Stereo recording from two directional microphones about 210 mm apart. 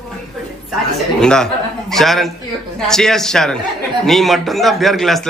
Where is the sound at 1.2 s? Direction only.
5° left (ahead or behind).